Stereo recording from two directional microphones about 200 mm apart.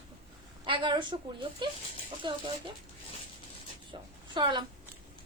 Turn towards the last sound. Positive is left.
turn(degrees=-25)  # may be behind; listen again after turning